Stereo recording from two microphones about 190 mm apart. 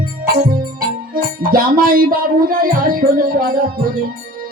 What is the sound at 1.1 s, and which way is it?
Music, 50° right (ahead or behind).